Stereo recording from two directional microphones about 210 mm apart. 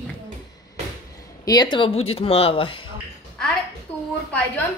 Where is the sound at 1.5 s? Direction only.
20° left (ahead or behind).